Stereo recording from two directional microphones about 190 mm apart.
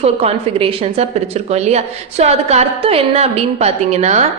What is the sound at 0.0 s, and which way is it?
A woman's voice, 30° right (ahead or behind).